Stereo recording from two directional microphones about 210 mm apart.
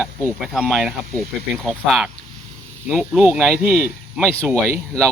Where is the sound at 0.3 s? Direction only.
Centre (ahead or behind).